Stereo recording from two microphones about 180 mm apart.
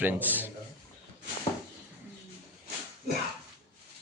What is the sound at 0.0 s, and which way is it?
Speech, 10° right (ahead or behind).